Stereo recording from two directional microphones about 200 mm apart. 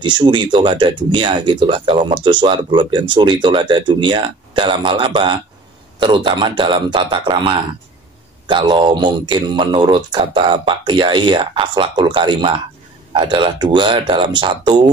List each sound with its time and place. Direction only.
0.0 s speech: 25° right (ahead or behind)